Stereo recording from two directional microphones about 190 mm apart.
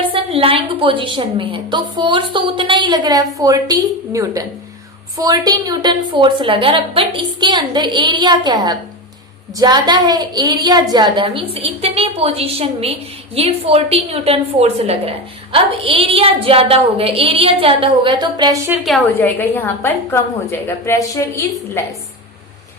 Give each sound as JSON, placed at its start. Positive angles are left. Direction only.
{"t": 0.1, "sound": "a woman's voice", "side_deg": -30}
{"t": 18.8, "sound": "a woman's voice", "side_deg": 5}